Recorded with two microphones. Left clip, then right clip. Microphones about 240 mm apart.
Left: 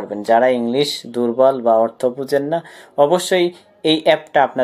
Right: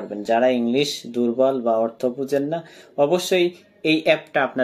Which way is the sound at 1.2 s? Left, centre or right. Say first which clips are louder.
Left 5 dB; centre.